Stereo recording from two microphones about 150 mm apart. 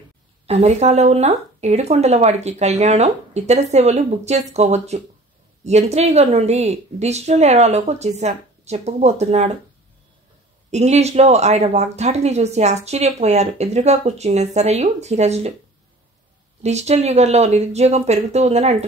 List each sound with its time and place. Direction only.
0.5 s speech: 45° right (ahead or behind)
10.7 s speech: 45° right (ahead or behind)
16.6 s speech: 45° right (ahead or behind)